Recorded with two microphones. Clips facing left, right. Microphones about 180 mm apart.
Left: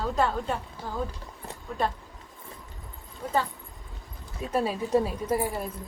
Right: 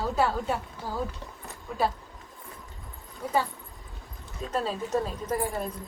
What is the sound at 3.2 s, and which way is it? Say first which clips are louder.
Speech: right 1 dB; 10° right (ahead or behind).